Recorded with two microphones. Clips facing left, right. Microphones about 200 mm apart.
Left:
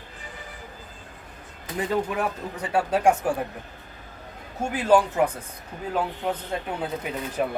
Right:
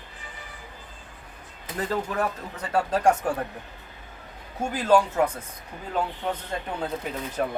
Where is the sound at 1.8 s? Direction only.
10° left (ahead or behind).